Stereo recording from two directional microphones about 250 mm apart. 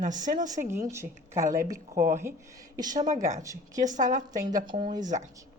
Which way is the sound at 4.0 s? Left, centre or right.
Right.